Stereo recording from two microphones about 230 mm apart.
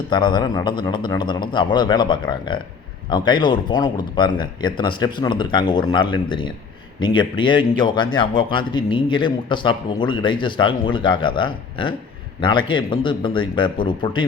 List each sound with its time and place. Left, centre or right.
0.1 s speech: centre